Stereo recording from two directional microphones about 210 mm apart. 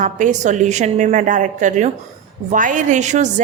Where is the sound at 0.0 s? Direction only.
35° right (ahead or behind).